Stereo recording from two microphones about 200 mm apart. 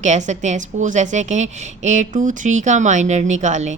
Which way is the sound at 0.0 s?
35° right (ahead or behind).